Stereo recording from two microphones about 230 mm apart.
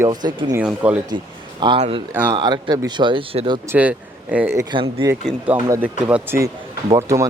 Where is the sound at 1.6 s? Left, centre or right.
Right.